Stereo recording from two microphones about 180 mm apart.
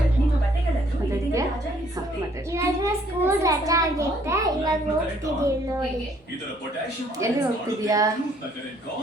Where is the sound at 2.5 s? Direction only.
15° right (ahead or behind).